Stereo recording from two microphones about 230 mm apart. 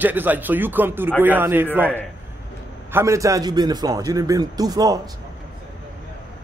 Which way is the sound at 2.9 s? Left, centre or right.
Centre.